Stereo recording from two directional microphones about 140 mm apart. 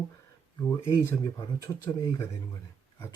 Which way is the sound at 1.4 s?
25° left (ahead or behind).